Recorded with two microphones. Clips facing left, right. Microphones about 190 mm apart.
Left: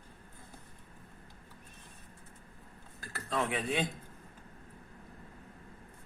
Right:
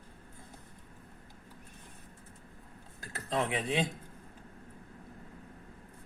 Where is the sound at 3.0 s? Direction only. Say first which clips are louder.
Right 1 dB; 20° right (ahead or behind).